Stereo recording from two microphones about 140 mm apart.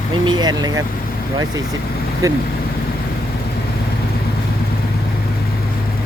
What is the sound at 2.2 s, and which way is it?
Speech, 25° right (ahead or behind).